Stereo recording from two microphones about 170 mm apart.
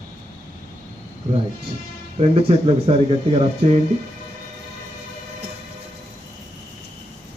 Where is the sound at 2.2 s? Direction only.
35° right (ahead or behind).